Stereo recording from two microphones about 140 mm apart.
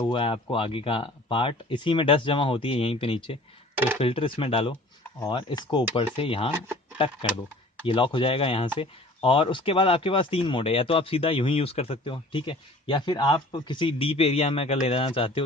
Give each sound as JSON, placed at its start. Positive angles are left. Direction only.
{"t": 0.0, "sound": "speech", "side_deg": 40}
{"t": 7.9, "sound": "speech", "side_deg": 35}